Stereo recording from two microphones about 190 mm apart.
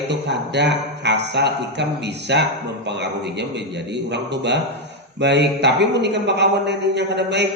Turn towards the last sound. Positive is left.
turn(degrees=-65)  # may be behind; listen again after turning